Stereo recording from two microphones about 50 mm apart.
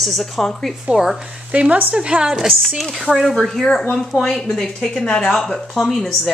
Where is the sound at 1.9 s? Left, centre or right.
Centre.